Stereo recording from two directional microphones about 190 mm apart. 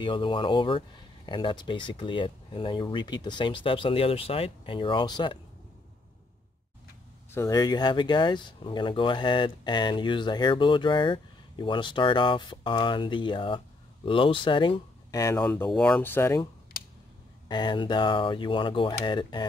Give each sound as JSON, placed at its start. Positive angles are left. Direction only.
{"t": 0.0, "sound": "speech", "side_deg": 25}
{"t": 7.2, "sound": "speech", "side_deg": 15}
{"t": 17.5, "sound": "speech", "side_deg": 25}